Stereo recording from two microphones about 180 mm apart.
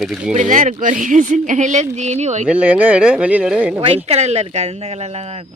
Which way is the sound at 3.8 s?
35° right (ahead or behind).